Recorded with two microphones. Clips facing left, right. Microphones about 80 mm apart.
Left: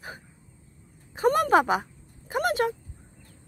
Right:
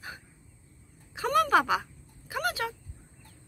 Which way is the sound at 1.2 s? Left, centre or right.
Left.